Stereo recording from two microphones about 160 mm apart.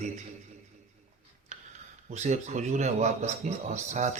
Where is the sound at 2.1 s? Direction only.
45° right (ahead or behind).